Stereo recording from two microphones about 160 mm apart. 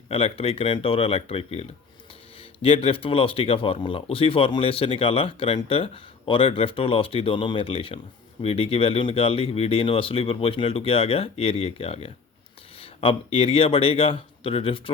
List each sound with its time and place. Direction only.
0.1 s speech: 35° left (ahead or behind)